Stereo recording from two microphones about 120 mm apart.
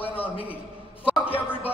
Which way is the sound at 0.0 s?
15° left (ahead or behind).